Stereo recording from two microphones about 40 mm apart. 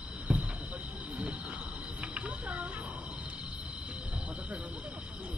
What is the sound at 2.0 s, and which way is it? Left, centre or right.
Cricket, right.